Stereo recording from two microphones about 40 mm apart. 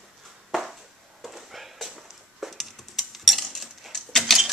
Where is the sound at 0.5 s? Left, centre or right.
Centre.